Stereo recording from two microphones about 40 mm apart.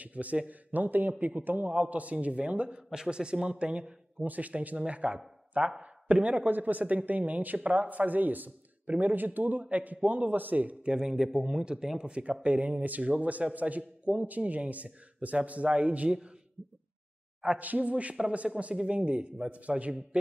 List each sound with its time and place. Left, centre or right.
0.0 s a man's voice: right
1.7 s a man's voice: right
2.9 s a man's voice: centre
4.2 s a man's voice: right
6.4 s a man's voice: right
11.0 s a man's voice: centre; by 16.1 s right
17.6 s a man's voice: right